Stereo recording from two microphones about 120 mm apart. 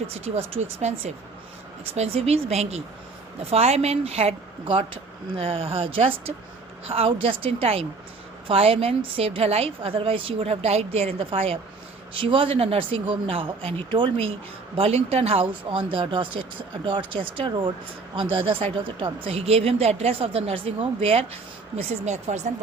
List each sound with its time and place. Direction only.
0.1 s speech: 60° right (ahead or behind)
5.4 s a woman's voice: 50° right (ahead or behind)
14.8 s speech: 55° right (ahead or behind)
15.9 s a woman's voice: 45° right (ahead or behind); by 22.5 s 75° right (ahead or behind)